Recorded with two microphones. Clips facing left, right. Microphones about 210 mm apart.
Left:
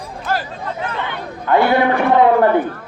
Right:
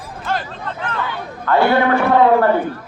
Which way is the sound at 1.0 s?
20° left (ahead or behind).